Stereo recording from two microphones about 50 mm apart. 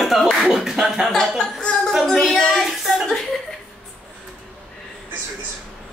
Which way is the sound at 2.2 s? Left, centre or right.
Centre.